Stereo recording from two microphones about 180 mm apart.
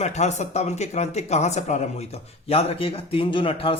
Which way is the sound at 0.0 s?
40° left (ahead or behind).